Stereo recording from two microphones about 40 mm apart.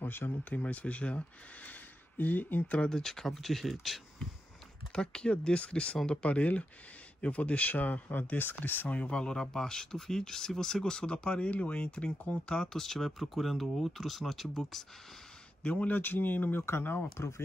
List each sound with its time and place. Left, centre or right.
0.0 s speech: left
0.5 s speech: left
2.9 s speech: centre
4.9 s speech: left
8.8 s speech: left
9.1 s speech: left
12.6 s speech: centre
15.6 s speech: left
16.0 s speech: left